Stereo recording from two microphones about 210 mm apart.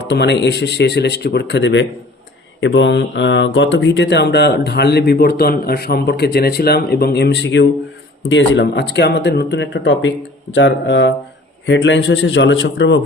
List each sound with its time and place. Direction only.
0.1 s speech: 55° left (ahead or behind)